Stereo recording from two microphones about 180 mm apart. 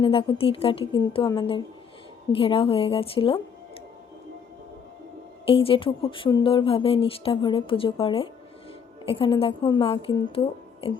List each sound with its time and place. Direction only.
0.0 s speech: 30° left (ahead or behind)
5.5 s a woman's voice: 30° left (ahead or behind)